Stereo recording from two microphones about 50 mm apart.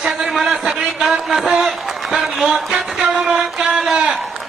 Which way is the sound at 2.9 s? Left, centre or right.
Centre.